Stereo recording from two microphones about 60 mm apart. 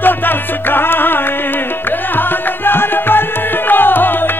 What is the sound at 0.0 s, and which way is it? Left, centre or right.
Music, left.